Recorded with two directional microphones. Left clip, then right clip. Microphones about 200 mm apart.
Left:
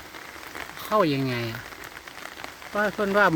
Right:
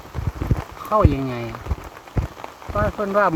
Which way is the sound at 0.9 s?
15° left (ahead or behind).